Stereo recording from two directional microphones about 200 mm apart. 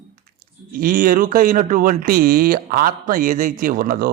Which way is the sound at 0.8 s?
45° right (ahead or behind).